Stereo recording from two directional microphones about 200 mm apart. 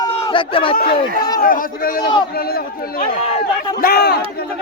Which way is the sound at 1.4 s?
45° left (ahead or behind).